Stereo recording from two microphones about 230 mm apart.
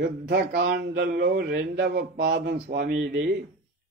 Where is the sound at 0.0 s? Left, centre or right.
Right.